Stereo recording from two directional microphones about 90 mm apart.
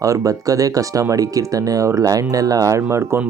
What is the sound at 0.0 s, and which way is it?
Speech, 35° right (ahead or behind).